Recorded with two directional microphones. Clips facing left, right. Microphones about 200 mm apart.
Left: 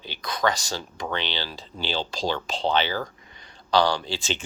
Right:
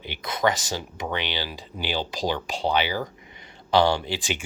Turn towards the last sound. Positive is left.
turn(degrees=-15)  # may be behind; listen again after turning